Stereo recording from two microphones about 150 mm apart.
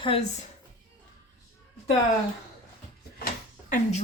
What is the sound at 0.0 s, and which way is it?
Speech, 40° left (ahead or behind).